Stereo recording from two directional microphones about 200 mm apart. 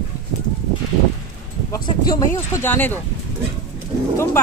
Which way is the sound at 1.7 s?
20° left (ahead or behind).